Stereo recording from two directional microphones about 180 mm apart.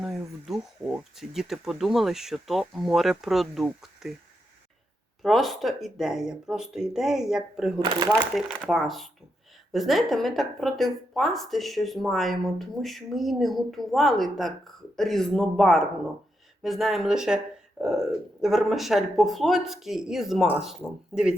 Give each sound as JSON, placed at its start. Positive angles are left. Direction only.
{"t": 0.0, "sound": "speech", "side_deg": 0}
{"t": 5.2, "sound": "speech", "side_deg": 0}
{"t": 7.9, "sound": "speech", "side_deg": -20}
{"t": 8.2, "sound": "speech", "side_deg": 0}